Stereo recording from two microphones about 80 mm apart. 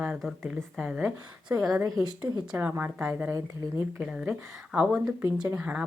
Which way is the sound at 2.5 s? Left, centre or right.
Right.